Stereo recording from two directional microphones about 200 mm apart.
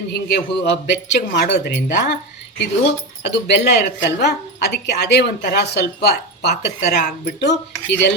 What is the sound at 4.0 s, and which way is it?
A man's voice, 55° left (ahead or behind).